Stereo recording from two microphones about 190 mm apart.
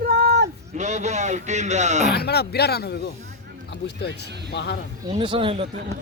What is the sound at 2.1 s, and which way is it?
Speech, 60° left (ahead or behind).